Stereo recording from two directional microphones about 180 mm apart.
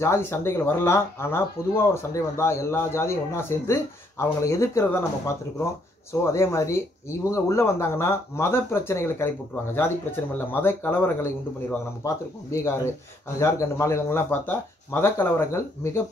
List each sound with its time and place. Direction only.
0.0 s speech: 15° left (ahead or behind)
6.2 s speech: 15° left (ahead or behind)
10.5 s speech: 10° left (ahead or behind)